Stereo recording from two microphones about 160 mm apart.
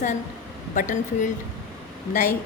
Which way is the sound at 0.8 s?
50° left (ahead or behind).